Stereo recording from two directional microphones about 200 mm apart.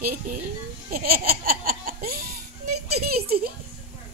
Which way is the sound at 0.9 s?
50° right (ahead or behind).